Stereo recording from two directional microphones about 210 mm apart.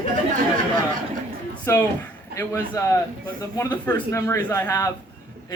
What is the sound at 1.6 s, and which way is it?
Speech, 10° left (ahead or behind).